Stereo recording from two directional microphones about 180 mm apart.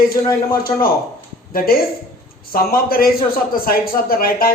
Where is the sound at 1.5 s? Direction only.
55° left (ahead or behind).